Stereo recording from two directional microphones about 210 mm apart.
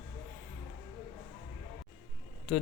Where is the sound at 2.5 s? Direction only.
5° left (ahead or behind).